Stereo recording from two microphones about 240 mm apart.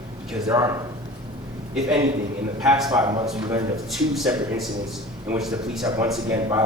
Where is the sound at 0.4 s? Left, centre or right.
Centre.